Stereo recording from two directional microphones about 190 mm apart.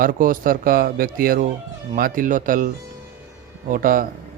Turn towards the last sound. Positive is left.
turn(degrees=-45)  # may be behind; listen again after turning